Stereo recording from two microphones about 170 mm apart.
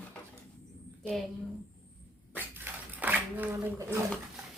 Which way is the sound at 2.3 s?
10° right (ahead or behind).